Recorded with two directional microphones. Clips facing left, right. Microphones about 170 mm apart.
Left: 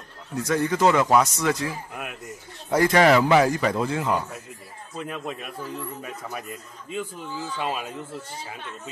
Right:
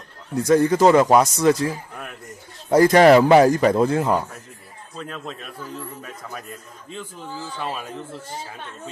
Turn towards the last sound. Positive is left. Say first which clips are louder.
# left 1 dB
turn(degrees=10)  # may be behind; listen again after turning